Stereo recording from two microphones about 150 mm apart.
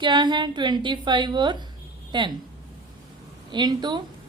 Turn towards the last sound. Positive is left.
turn(degrees=-30)  # may be behind; listen again after turning